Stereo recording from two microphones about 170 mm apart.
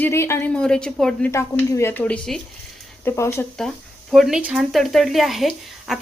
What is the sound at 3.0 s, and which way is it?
Speech, 15° left (ahead or behind).